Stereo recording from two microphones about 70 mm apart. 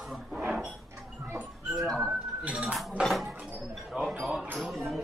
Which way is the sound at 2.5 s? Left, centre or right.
Centre.